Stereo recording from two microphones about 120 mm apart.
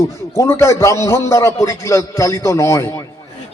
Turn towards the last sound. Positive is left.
turn(degrees=25)  # may be behind; listen again after turning